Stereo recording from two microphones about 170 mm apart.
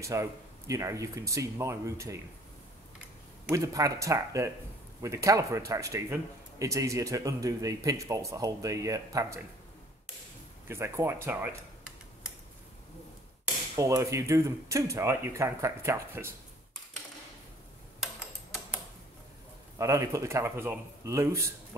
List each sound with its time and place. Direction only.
0.0 s speech: 20° right (ahead or behind)
3.4 s speech: 20° right (ahead or behind)
10.7 s speech: 15° right (ahead or behind)
13.7 s speech: 20° right (ahead or behind)
18.0 s tick-tock: centre (ahead or behind)
19.8 s speech: 20° right (ahead or behind)